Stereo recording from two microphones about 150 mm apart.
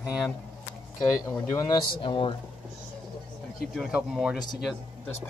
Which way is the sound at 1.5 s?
25° left (ahead or behind).